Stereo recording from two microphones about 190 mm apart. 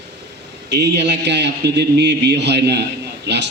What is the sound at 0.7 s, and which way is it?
A man's voice, 65° right (ahead or behind).